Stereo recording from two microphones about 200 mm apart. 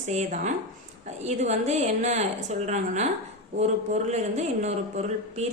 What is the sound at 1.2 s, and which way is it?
Speech, 35° right (ahead or behind).